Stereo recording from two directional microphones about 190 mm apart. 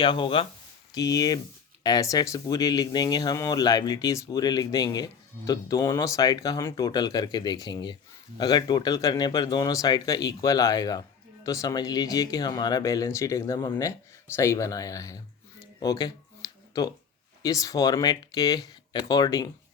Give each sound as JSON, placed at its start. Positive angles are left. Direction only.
{"t": 0.0, "sound": "speech", "side_deg": 25}
{"t": 15.8, "sound": "a sound", "side_deg": 20}
{"t": 17.4, "sound": "speech", "side_deg": 20}